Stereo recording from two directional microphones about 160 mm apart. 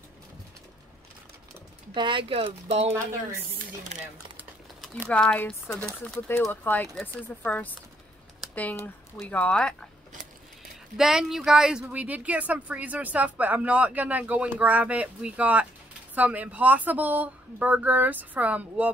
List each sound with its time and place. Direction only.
2.0 s speech: 30° right (ahead or behind)
5.1 s speech: 10° left (ahead or behind)
8.4 s typing: centre (ahead or behind)
9.2 s speech: 10° left (ahead or behind)
11.0 s speech: 5° right (ahead or behind)